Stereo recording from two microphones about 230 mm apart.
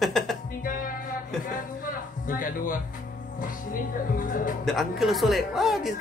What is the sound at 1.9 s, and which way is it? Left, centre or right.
Music, left.